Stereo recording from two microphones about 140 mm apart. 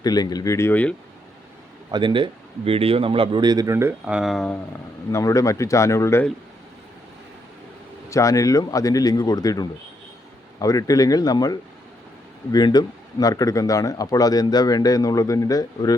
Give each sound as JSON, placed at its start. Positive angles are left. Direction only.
{"t": 0.0, "sound": "speech", "side_deg": 30}
{"t": 1.9, "sound": "speech", "side_deg": -35}
{"t": 4.0, "sound": "speech", "side_deg": -5}
{"t": 5.1, "sound": "speech", "side_deg": 25}
{"t": 8.1, "sound": "speech", "side_deg": 25}